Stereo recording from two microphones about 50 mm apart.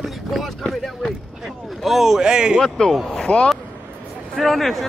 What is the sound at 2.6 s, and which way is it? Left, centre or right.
Speech, centre.